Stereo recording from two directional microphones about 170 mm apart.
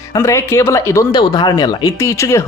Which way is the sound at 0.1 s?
15° left (ahead or behind).